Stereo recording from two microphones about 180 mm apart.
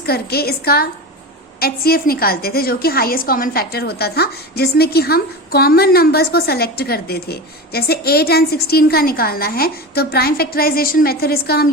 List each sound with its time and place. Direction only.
0.0 s a woman's voice: 60° left (ahead or behind)